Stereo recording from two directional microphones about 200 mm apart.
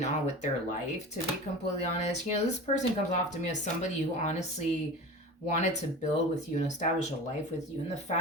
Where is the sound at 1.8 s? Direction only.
35° left (ahead or behind).